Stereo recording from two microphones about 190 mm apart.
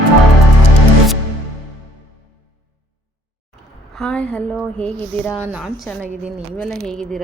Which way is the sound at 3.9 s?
5° left (ahead or behind).